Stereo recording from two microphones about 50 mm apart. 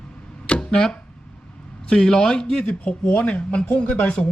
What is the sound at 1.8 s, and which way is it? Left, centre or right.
Speech, centre.